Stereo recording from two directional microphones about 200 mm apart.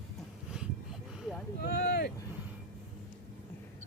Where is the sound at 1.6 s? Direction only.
55° left (ahead or behind).